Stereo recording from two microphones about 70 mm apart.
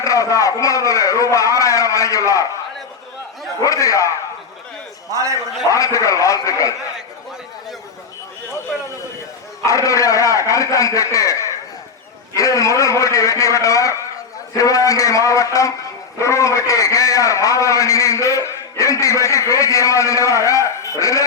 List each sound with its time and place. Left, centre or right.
0.0 s a man's voice: left
3.6 s a man's voice: left
5.7 s a man's voice: left
9.6 s a man's voice: left